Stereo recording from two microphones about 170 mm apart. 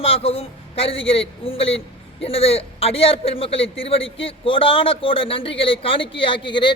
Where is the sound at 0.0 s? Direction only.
35° left (ahead or behind).